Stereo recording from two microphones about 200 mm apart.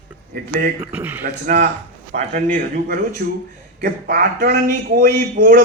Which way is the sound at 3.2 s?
45° right (ahead or behind).